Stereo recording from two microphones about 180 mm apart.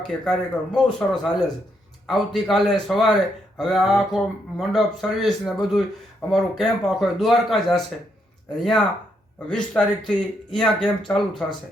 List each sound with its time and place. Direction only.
0.1 s speech: 5° left (ahead or behind)
9.5 s speech: 5° left (ahead or behind)